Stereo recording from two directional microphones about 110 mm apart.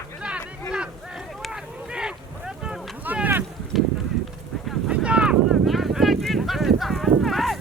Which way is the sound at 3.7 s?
Centre (ahead or behind).